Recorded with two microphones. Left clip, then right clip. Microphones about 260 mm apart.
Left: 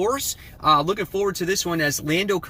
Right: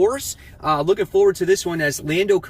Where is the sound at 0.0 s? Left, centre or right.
Centre.